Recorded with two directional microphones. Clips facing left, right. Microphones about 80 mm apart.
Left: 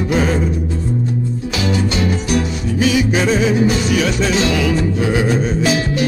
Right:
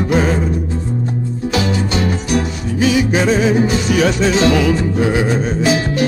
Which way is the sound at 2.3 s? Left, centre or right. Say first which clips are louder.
Even; right.